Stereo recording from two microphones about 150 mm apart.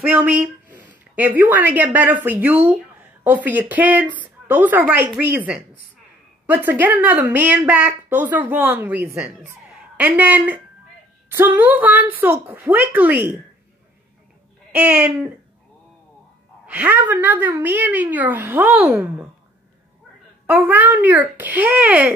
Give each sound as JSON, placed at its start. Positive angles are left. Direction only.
{"t": 0.0, "sound": "a woman's voice", "side_deg": -10}
{"t": 14.7, "sound": "a woman's voice", "side_deg": -5}
{"t": 16.6, "sound": "a woman's voice", "side_deg": -10}
{"t": 20.4, "sound": "a woman's voice", "side_deg": -10}